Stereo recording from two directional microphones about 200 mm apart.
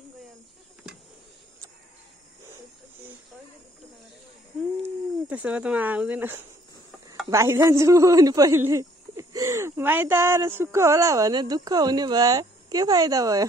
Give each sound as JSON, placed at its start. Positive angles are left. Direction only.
{"t": 4.8, "sound": "speech", "side_deg": -5}